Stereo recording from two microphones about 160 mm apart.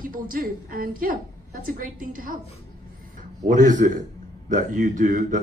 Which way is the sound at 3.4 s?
50° right (ahead or behind).